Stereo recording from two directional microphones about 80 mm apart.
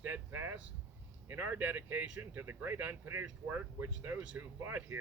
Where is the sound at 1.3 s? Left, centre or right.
Right.